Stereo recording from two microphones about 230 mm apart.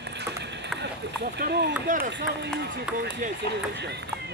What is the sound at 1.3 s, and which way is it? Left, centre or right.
Speech, right.